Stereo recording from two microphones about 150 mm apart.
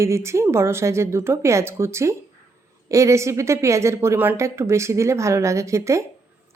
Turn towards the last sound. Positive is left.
turn(degrees=-20)  # may be behind; listen again after turning